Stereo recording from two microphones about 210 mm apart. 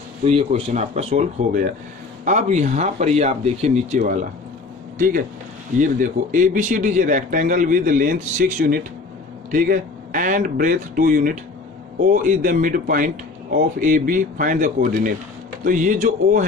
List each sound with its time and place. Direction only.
0.2 s a man's voice: 25° right (ahead or behind)